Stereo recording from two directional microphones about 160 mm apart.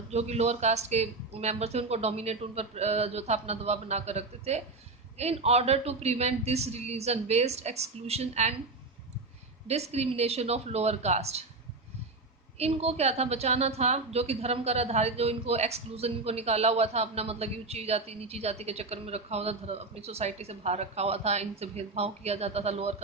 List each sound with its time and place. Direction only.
0.1 s a woman's voice: 40° right (ahead or behind)
9.6 s a woman's voice: 40° right (ahead or behind)
12.5 s a woman's voice: 40° right (ahead or behind)